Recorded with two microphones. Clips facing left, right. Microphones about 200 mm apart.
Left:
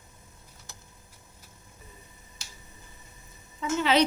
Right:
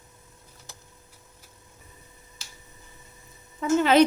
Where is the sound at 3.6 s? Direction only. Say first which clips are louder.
Right 5 dB; 50° right (ahead or behind).